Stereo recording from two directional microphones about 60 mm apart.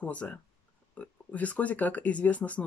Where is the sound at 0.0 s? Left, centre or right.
Left.